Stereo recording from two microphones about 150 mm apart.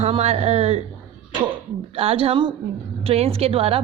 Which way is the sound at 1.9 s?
40° right (ahead or behind).